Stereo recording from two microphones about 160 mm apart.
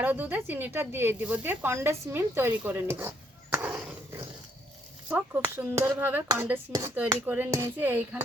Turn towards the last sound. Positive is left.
turn(degrees=-10)  # may be behind; listen again after turning